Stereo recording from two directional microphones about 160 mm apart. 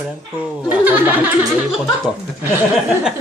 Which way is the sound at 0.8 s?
10° right (ahead or behind).